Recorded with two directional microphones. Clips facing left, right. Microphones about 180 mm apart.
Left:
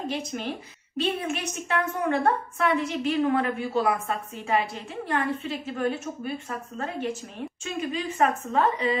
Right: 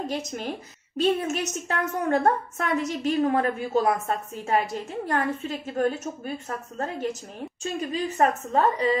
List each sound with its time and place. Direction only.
0.0 s a woman's voice: 40° right (ahead or behind)
7.6 s a woman's voice: 35° right (ahead or behind)